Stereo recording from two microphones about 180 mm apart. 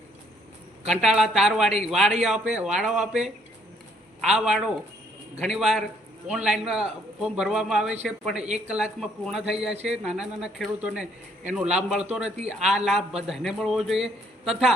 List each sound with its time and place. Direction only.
0.9 s a man's voice: 5° right (ahead or behind)